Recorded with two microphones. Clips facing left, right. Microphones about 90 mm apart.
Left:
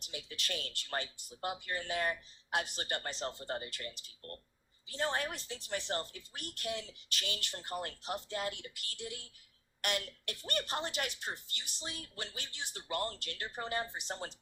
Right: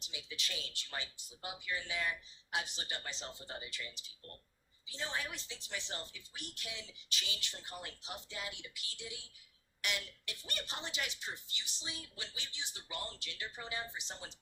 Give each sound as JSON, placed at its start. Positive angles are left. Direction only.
{"t": 0.0, "sound": "a woman's voice", "side_deg": 55}